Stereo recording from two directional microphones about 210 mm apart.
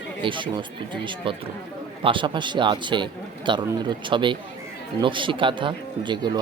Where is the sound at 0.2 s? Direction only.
25° right (ahead or behind).